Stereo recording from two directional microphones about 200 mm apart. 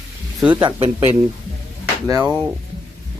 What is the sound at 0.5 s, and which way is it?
Speech, 25° right (ahead or behind).